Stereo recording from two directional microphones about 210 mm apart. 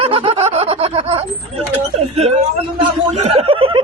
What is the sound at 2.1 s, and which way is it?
Speech, 30° right (ahead or behind).